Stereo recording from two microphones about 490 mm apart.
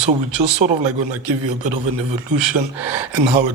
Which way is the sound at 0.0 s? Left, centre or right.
Right.